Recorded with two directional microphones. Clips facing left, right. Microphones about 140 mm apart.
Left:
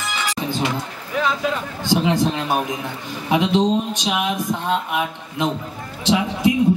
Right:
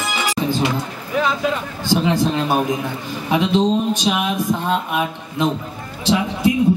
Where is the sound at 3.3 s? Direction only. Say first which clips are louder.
Right 1 dB; 20° left (ahead or behind).